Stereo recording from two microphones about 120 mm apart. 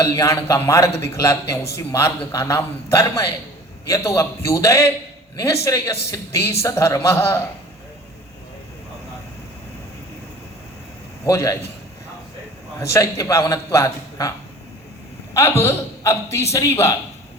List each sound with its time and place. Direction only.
0.0 s a man's voice: 25° left (ahead or behind)
11.3 s a man's voice: 25° left (ahead or behind)
12.8 s a man's voice: 25° left (ahead or behind)
15.4 s a man's voice: 20° left (ahead or behind)